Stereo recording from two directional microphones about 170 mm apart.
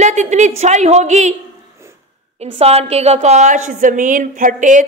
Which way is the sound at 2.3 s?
40° right (ahead or behind).